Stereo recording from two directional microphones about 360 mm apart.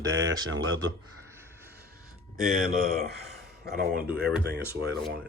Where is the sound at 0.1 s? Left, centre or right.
Right.